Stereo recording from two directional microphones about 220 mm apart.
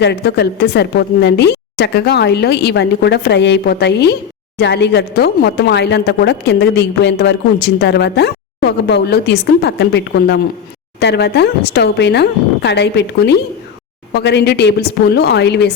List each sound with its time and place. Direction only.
0.0 s speech: 50° left (ahead or behind)